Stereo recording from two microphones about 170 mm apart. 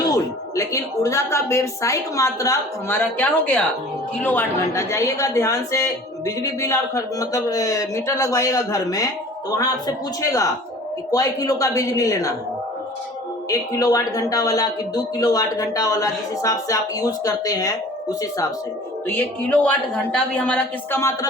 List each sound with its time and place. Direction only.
0.0 s speech: 20° left (ahead or behind)
13.5 s speech: 20° left (ahead or behind)
19.0 s speech: 10° left (ahead or behind)